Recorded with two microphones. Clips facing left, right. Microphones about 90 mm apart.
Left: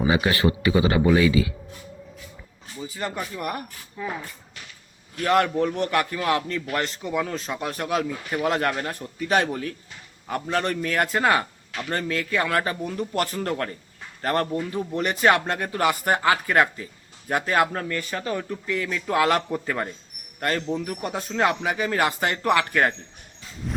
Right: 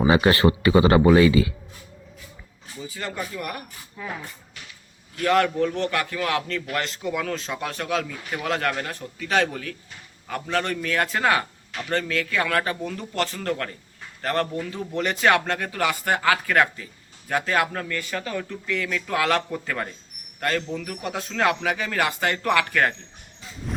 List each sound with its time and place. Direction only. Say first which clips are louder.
0.1 s speech: right 4 dB; 55° right (ahead or behind)
2.9 s speech: left 1 dB; 20° left (ahead or behind)
5.2 s speech: even; 25° left (ahead or behind)
6.7 s speech: even; 5° left (ahead or behind)
7.6 s speech: left 3 dB; 20° left (ahead or behind)
21.1 s speech: even; 5° left (ahead or behind)
21.3 s speech: even; 20° left (ahead or behind)